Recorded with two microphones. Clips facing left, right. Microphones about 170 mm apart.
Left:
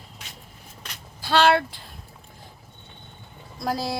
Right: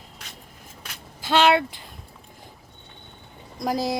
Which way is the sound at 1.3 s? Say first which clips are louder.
Even; 20° right (ahead or behind).